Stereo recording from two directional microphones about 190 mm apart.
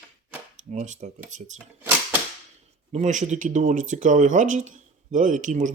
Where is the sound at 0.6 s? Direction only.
40° right (ahead or behind).